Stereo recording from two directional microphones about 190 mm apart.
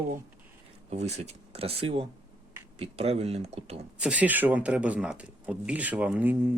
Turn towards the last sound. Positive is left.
turn(degrees=-10)  # may be behind; listen again after turning